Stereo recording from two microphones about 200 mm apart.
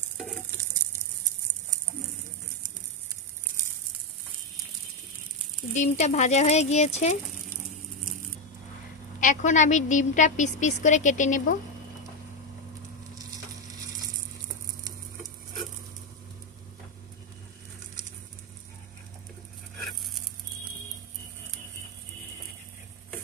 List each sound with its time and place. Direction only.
5.7 s a woman's voice: 35° left (ahead or behind)
9.2 s a woman's voice: 40° left (ahead or behind)